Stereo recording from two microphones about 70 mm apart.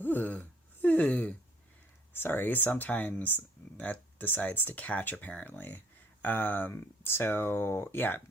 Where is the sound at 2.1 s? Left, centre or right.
Left.